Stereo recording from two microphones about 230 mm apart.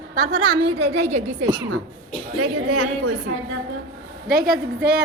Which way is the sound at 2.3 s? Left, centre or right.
Right.